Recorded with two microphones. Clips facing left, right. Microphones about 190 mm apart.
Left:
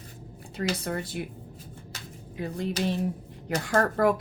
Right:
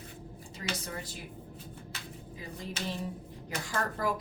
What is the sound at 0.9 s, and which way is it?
Speech, 65° left (ahead or behind).